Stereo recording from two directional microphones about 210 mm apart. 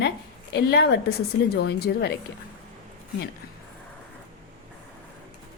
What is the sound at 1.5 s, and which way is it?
Speech, 50° left (ahead or behind).